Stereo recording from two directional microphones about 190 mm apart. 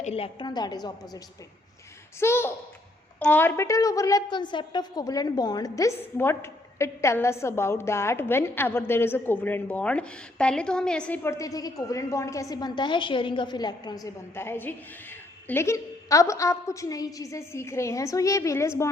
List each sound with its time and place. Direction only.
0.0 s a woman's voice: 30° left (ahead or behind); by 18.9 s 15° left (ahead or behind)